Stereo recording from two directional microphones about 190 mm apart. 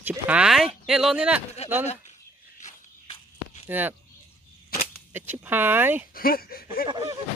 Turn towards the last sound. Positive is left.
turn(degrees=-20)  # may be behind; listen again after turning